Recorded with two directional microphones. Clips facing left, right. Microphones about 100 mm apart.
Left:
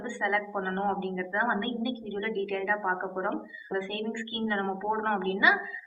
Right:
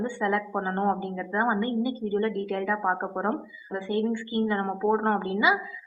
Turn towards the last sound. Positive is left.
turn(degrees=-20)  # may be behind; listen again after turning